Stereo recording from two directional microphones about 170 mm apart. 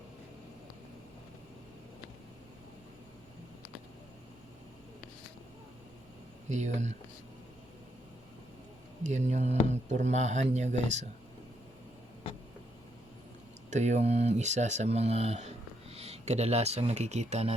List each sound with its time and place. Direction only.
6.5 s speech: 45° right (ahead or behind)
9.0 s speech: 45° right (ahead or behind)
13.7 s speech: 45° right (ahead or behind)